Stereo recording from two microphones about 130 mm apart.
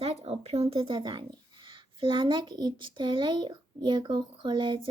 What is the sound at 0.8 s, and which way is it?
A child's voice, 35° right (ahead or behind).